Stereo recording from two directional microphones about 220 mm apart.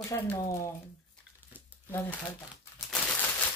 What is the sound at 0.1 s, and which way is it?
Speech, 15° left (ahead or behind).